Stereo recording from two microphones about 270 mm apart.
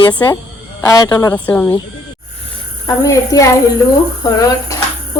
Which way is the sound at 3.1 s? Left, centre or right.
Centre.